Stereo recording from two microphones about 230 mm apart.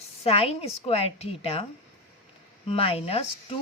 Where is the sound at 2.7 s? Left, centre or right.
Left.